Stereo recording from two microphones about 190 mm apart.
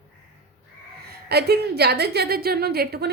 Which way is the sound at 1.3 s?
55° right (ahead or behind).